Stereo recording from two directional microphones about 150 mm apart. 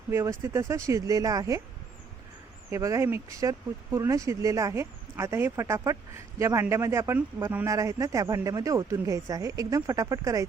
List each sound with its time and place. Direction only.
0.1 s speech: 20° right (ahead or behind)
2.6 s speech: 20° right (ahead or behind)